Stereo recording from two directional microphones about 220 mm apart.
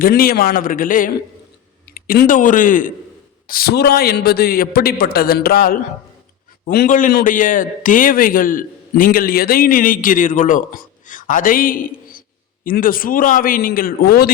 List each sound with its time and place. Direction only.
0.0 s a man's voice: 40° left (ahead or behind)